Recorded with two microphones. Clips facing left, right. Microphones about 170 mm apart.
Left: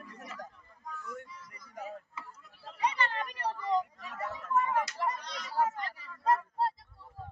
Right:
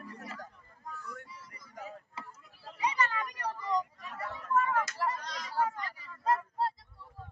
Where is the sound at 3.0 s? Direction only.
25° left (ahead or behind).